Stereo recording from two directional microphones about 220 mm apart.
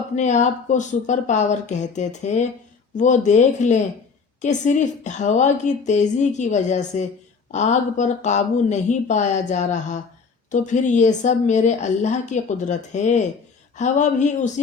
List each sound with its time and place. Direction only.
0.2 s a woman's voice: 35° left (ahead or behind)